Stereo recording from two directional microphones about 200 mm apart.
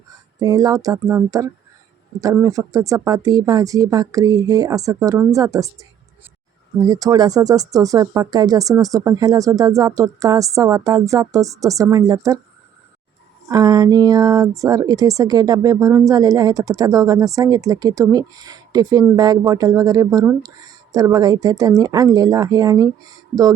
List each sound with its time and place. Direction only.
0.3 s speech: 20° right (ahead or behind)
6.7 s speech: 20° right (ahead or behind)
13.5 s speech: 20° right (ahead or behind)